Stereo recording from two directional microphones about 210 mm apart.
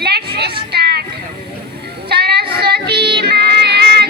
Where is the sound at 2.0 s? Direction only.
50° right (ahead or behind).